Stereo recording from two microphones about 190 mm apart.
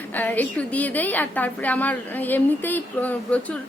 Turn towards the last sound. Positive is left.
turn(degrees=5)  # may be behind; listen again after turning